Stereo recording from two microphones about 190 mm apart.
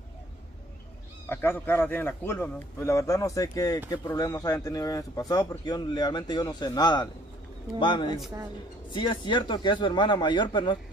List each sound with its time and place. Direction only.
1.3 s a man's voice: 10° left (ahead or behind)